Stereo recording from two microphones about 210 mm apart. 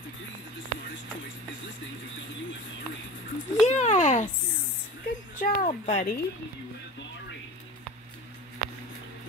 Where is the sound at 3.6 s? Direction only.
35° left (ahead or behind).